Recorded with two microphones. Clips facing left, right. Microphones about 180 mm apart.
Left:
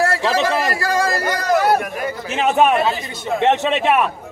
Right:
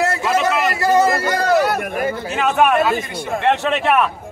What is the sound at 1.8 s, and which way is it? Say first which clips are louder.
Chatter: right 3 dB; 55° right (ahead or behind).